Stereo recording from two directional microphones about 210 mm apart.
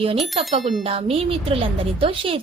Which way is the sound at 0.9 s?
25° right (ahead or behind).